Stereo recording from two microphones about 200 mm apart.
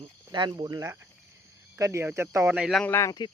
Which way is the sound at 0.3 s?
20° right (ahead or behind).